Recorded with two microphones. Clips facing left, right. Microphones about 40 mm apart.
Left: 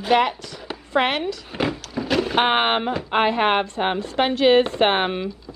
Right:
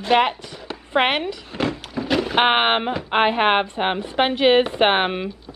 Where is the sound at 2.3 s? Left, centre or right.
Centre.